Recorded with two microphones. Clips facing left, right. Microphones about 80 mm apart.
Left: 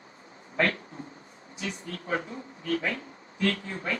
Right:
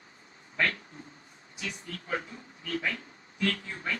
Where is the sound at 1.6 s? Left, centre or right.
Left.